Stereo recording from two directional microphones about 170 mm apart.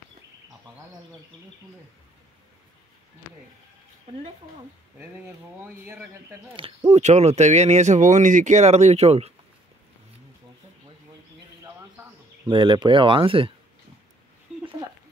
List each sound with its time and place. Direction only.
5.0 s speech: 15° right (ahead or behind)
6.9 s speech: 40° right (ahead or behind)
12.4 s speech: 30° right (ahead or behind)